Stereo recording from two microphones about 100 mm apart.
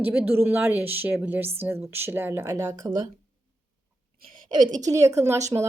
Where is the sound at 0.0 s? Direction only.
20° right (ahead or behind); by 3.1 s 45° right (ahead or behind).